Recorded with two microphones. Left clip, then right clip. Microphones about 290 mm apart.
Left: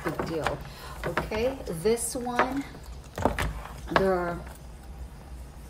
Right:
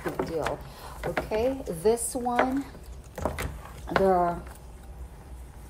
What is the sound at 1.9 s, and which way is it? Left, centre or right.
Speech, centre.